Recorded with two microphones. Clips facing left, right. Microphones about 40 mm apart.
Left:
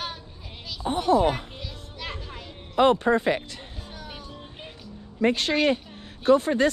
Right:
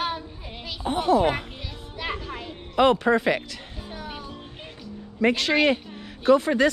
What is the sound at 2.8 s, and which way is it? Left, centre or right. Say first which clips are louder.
Speech: right 1 dB; right.